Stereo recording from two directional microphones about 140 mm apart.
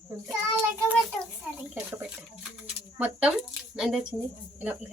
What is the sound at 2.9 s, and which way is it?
Speech, 10° right (ahead or behind).